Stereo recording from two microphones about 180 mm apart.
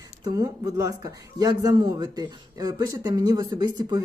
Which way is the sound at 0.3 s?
20° right (ahead or behind).